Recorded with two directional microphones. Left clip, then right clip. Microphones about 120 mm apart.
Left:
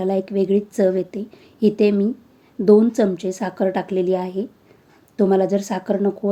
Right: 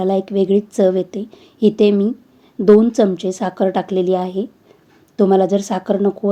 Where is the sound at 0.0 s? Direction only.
25° right (ahead or behind).